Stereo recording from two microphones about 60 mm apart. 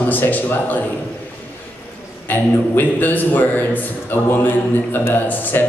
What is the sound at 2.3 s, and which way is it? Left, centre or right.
A man's voice, left.